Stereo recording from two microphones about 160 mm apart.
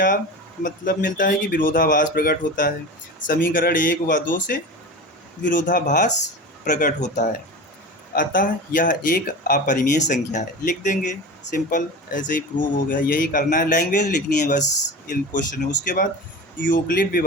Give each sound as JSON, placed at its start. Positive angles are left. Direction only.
{"t": 0.6, "sound": "speech", "side_deg": 55}
{"t": 15.1, "sound": "speech", "side_deg": 60}